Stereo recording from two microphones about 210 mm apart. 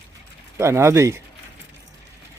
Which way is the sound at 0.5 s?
15° right (ahead or behind).